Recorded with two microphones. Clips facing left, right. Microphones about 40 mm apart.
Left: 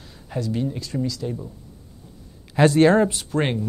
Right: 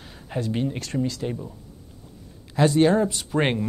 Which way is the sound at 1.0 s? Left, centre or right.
Right.